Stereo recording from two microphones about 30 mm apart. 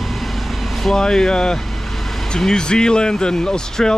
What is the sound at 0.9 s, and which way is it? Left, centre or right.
Speech, centre.